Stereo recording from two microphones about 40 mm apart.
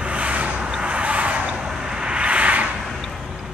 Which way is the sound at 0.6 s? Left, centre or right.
Right.